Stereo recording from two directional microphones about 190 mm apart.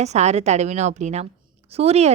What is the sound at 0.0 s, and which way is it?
A woman's voice, 35° right (ahead or behind).